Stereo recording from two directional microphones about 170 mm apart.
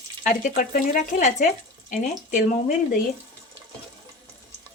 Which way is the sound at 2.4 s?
50° left (ahead or behind).